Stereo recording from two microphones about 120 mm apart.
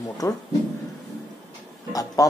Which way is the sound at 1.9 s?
30° left (ahead or behind).